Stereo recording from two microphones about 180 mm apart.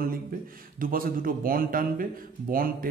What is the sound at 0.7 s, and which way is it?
A man's voice, 50° right (ahead or behind).